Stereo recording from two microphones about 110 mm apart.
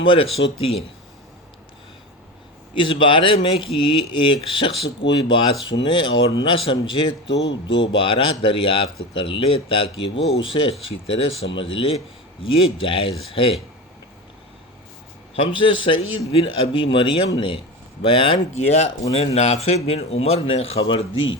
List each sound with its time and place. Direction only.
0.0 s speech: 50° left (ahead or behind)
2.7 s speech: 50° left (ahead or behind)
15.4 s speech: 50° left (ahead or behind)
19.1 s speech: 70° left (ahead or behind)